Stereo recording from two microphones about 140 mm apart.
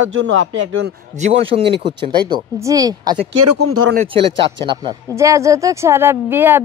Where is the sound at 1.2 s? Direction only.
45° right (ahead or behind); by 3.2 s 25° right (ahead or behind).